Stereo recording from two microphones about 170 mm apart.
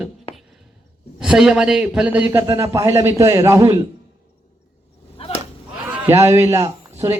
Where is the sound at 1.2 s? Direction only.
5° right (ahead or behind); by 3.6 s 20° right (ahead or behind).